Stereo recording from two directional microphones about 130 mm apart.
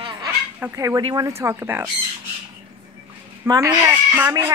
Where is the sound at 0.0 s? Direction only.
35° right (ahead or behind).